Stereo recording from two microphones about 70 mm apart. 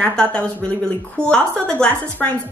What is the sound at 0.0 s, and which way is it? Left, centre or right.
Speech, centre.